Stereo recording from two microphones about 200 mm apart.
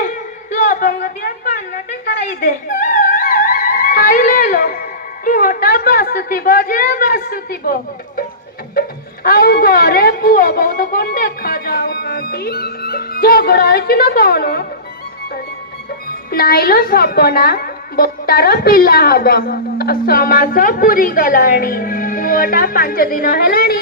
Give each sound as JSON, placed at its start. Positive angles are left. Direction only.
{"t": 0.0, "sound": "a sound", "side_deg": 40}
{"t": 9.2, "sound": "a woman's voice", "side_deg": 50}
{"t": 16.0, "sound": "a woman's voice", "side_deg": 50}